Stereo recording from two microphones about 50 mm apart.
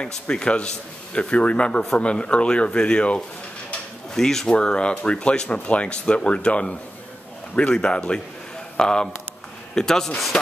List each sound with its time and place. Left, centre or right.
0.0 s speech: centre
4.1 s speech: centre